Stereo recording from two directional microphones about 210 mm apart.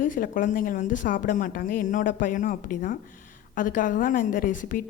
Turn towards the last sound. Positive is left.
turn(degrees=40)  # may be behind; listen again after turning